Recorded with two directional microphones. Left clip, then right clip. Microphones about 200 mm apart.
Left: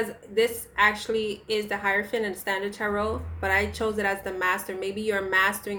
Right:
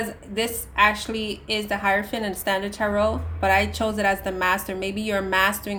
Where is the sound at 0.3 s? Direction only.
35° right (ahead or behind).